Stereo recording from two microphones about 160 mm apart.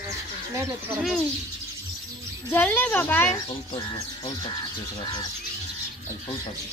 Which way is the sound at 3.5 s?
30° left (ahead or behind).